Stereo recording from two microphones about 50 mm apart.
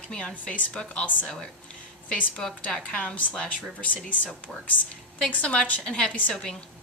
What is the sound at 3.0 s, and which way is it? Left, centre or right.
A woman's voice, left.